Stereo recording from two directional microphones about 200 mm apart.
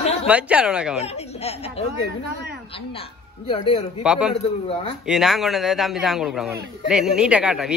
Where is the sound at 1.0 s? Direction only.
30° left (ahead or behind).